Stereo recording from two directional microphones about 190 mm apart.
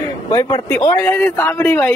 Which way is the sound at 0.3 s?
20° left (ahead or behind).